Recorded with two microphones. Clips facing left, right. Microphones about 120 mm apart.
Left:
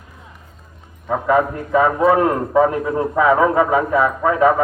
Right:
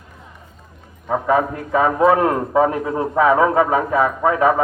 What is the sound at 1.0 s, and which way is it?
A man's voice, 20° right (ahead or behind).